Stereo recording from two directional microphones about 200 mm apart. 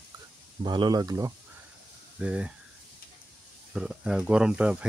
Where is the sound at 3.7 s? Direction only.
5° right (ahead or behind).